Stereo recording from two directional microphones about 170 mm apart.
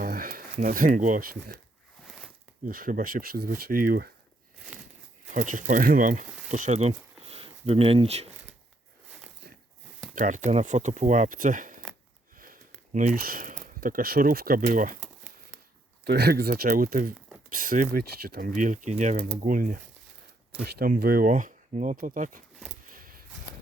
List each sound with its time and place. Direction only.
0.0 s speech: 55° right (ahead or behind)
2.6 s speech: 55° right (ahead or behind)
5.3 s speech: 50° right (ahead or behind)
10.2 s speech: 45° right (ahead or behind)
16.0 s speech: 70° right (ahead or behind); by 19.3 s 40° right (ahead or behind)
19.5 s speech: 55° right (ahead or behind)
22.8 s a sound: 55° right (ahead or behind)